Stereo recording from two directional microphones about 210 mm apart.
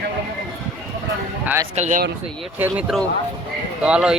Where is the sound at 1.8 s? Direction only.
35° right (ahead or behind).